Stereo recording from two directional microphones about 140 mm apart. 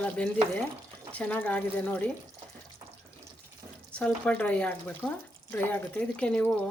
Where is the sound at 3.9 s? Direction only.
10° left (ahead or behind).